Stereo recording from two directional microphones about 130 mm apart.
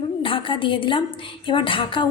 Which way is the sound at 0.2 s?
40° left (ahead or behind).